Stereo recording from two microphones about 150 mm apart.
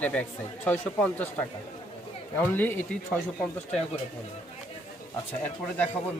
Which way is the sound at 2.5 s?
15° left (ahead or behind).